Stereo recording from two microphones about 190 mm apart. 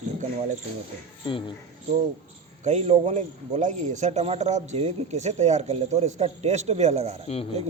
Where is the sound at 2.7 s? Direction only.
35° right (ahead or behind).